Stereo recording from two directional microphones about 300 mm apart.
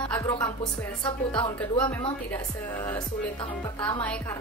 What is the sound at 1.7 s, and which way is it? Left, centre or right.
Speech, centre.